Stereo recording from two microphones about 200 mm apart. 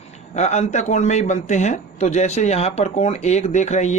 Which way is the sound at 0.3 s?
35° left (ahead or behind).